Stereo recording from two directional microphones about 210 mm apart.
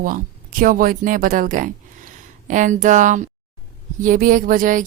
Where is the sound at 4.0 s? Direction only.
40° right (ahead or behind).